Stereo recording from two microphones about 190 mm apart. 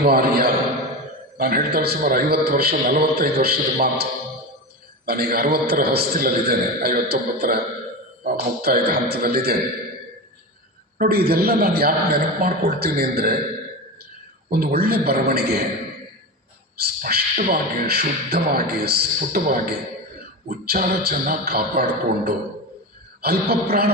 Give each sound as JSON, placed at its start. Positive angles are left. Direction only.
{"t": 0.0, "sound": "a man's voice", "side_deg": -55}
{"t": 10.9, "sound": "a man's voice", "side_deg": -50}
{"t": 14.5, "sound": "speech", "side_deg": -55}
{"t": 16.8, "sound": "a man's voice", "side_deg": -55}